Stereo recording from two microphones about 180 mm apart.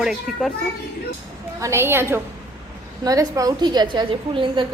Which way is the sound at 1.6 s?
15° right (ahead or behind).